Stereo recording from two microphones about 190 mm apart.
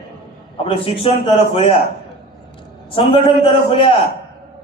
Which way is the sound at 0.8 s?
30° left (ahead or behind).